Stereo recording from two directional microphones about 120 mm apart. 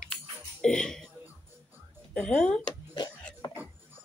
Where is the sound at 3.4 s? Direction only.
40° left (ahead or behind).